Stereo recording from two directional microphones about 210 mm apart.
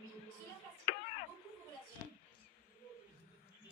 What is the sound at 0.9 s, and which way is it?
Tick-tock, 30° left (ahead or behind).